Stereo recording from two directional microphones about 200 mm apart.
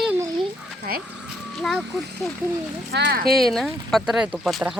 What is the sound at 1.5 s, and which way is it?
Speech, centre (ahead or behind).